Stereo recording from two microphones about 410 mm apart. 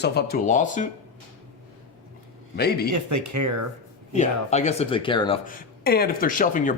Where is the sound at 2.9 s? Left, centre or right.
Right.